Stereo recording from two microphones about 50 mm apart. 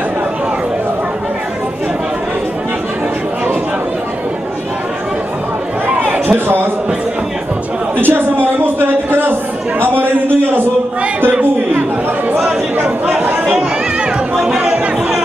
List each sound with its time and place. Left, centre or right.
6.2 s a man's voice: right
8.0 s a sound: right
14.3 s music: centre